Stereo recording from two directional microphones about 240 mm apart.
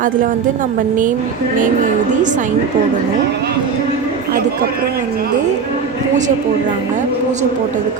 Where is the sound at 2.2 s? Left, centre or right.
Right.